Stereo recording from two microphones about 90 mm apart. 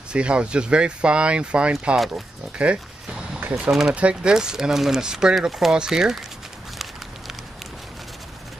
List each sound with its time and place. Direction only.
0.1 s speech: 10° right (ahead or behind)
2.5 s a sound: 10° right (ahead or behind)
3.9 s speech: 10° right (ahead or behind)